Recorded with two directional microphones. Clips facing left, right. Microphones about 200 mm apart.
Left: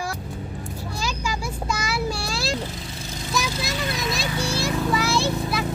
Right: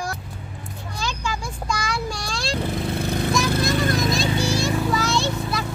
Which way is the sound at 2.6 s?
60° right (ahead or behind).